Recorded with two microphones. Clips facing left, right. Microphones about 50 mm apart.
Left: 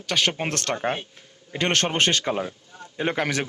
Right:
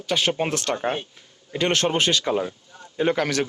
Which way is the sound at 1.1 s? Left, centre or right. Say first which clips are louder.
Right 3 dB; left.